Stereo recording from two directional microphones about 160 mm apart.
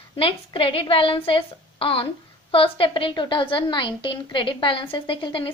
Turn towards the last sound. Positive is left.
turn(degrees=30)  # may be behind; listen again after turning